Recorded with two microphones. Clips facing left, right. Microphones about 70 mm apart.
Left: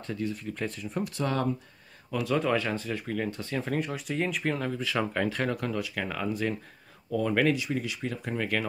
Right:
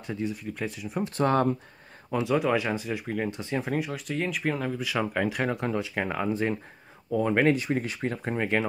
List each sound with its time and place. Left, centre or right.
0.0 s speech: centre
0.4 s speech: centre
1.0 s speech: right
2.0 s speech: right
2.3 s speech: centre
7.5 s speech: right